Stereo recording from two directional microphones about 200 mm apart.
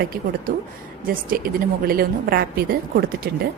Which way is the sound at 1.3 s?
45° right (ahead or behind).